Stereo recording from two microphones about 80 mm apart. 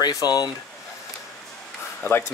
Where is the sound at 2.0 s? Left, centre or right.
Left.